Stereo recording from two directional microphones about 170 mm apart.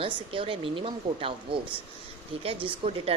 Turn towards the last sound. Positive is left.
turn(degrees=-35)  # may be behind; listen again after turning